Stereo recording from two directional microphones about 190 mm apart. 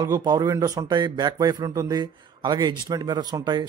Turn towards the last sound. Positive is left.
turn(degrees=-20)  # may be behind; listen again after turning